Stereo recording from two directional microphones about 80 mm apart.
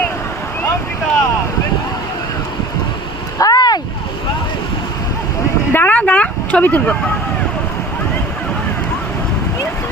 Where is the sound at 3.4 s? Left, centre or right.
Left.